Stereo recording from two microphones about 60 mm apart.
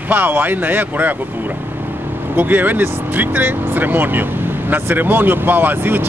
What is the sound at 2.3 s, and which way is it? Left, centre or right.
Speech, right.